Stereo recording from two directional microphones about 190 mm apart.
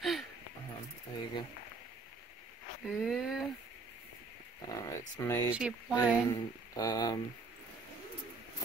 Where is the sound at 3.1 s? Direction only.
Centre (ahead or behind).